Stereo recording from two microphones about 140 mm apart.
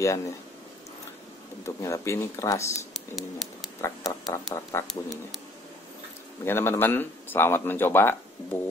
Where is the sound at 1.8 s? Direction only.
20° left (ahead or behind).